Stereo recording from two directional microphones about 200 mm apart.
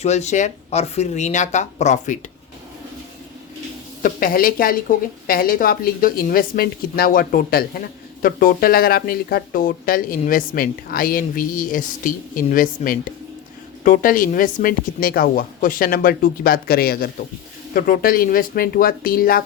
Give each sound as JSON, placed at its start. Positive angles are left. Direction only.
{"t": 0.0, "sound": "speech", "side_deg": 35}
{"t": 4.0, "sound": "a woman's voice", "side_deg": 45}